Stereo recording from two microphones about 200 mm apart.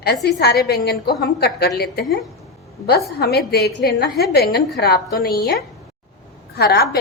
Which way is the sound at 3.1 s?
55° left (ahead or behind).